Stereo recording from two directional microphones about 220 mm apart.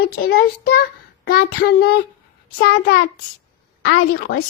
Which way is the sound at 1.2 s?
45° left (ahead or behind).